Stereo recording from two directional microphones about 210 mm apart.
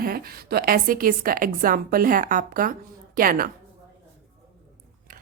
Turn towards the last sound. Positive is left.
turn(degrees=-40)  # may be behind; listen again after turning